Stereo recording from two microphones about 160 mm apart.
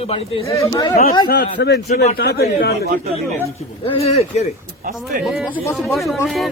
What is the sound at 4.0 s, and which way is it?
Speech, 40° left (ahead or behind).